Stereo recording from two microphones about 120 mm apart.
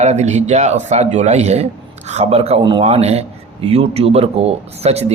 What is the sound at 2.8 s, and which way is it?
Speech, 60° right (ahead or behind).